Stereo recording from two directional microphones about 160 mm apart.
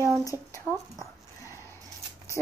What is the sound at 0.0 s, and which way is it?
Speech, 20° left (ahead or behind).